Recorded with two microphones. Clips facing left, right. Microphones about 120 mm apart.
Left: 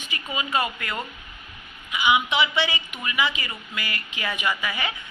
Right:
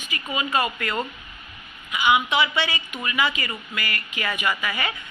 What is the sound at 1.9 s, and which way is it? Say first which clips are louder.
A man's voice: right 1 dB; 15° left (ahead or behind).